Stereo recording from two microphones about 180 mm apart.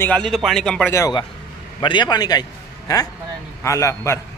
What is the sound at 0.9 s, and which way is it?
A man's voice, 20° left (ahead or behind).